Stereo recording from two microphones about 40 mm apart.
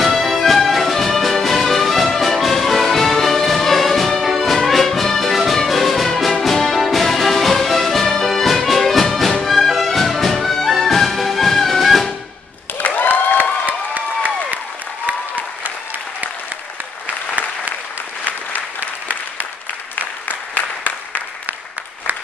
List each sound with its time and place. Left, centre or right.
0.0 s music: centre
12.8 s applause: left
13.7 s a sound: right
15.0 s applause: right
20.2 s applause: left